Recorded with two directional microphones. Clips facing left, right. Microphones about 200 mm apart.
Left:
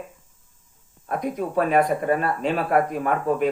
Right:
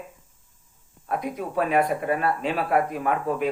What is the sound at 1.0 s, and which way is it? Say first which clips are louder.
Speech: left 3 dB; 45° left (ahead or behind).